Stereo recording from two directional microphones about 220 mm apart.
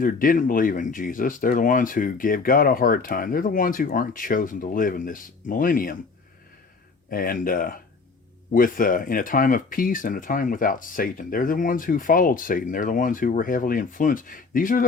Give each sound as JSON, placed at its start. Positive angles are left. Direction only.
{"t": 0.0, "sound": "speech", "side_deg": 40}
{"t": 7.1, "sound": "speech", "side_deg": 40}